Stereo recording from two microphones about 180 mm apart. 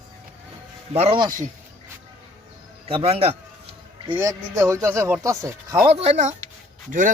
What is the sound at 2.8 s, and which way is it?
Speech, 35° right (ahead or behind).